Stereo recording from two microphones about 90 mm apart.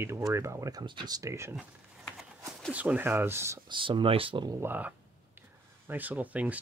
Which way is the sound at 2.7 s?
15° right (ahead or behind).